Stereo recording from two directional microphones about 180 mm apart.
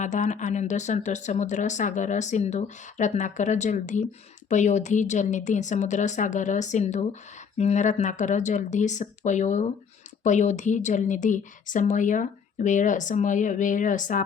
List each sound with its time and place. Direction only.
0.0 s a woman's voice: 45° left (ahead or behind)